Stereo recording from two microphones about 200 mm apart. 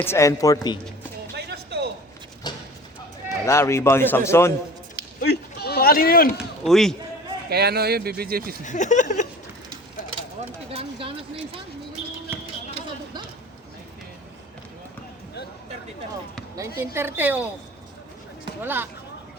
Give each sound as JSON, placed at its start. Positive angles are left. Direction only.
{"t": 0.0, "sound": "speech", "side_deg": 15}
{"t": 1.5, "sound": "a sound", "side_deg": -55}
{"t": 2.5, "sound": "a sound", "side_deg": 20}
{"t": 3.2, "sound": "speech", "side_deg": 15}
{"t": 5.2, "sound": "speech", "side_deg": 55}
{"t": 6.3, "sound": "speech", "side_deg": 0}
{"t": 7.5, "sound": "speech", "side_deg": -55}
{"t": 8.6, "sound": "speech", "side_deg": 40}
{"t": 10.7, "sound": "speech", "side_deg": -30}
{"t": 16.6, "sound": "a woman's voice", "side_deg": -15}
{"t": 18.6, "sound": "a woman's voice", "side_deg": -10}